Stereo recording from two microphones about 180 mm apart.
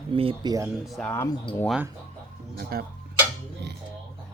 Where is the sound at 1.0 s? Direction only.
10° left (ahead or behind).